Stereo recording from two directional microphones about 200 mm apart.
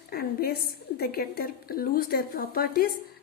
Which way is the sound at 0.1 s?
50° left (ahead or behind).